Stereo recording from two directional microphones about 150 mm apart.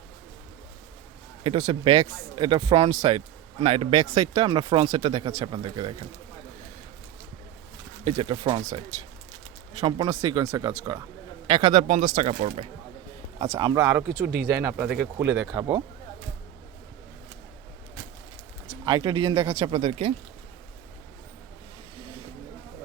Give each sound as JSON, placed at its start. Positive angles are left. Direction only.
{"t": 1.5, "sound": "a man's voice", "side_deg": -35}
{"t": 4.0, "sound": "a man's voice", "side_deg": -25}
{"t": 8.1, "sound": "a man's voice", "side_deg": -35}
{"t": 9.8, "sound": "a man's voice", "side_deg": -20}
{"t": 14.8, "sound": "speech", "side_deg": -5}
{"t": 15.5, "sound": "speech", "side_deg": -30}
{"t": 18.9, "sound": "a man's voice", "side_deg": -30}